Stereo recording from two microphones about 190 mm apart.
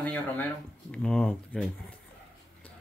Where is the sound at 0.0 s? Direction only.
10° left (ahead or behind).